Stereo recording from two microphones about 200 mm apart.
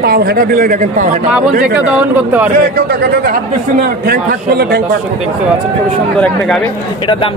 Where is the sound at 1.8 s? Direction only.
10° right (ahead or behind).